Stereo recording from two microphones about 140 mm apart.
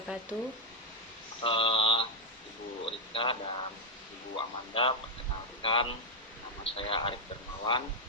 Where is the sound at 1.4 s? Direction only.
40° left (ahead or behind).